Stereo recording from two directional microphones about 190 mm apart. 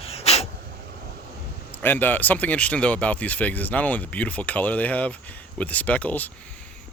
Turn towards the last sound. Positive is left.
turn(degrees=10)  # may be behind; listen again after turning